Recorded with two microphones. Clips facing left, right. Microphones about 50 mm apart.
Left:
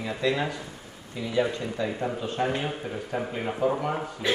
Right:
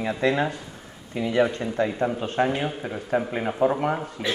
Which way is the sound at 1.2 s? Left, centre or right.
Right.